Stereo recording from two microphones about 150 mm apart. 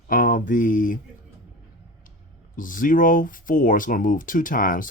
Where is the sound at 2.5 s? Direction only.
65° left (ahead or behind).